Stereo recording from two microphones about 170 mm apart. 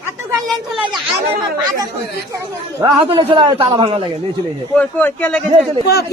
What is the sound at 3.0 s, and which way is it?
A man's voice, 30° right (ahead or behind).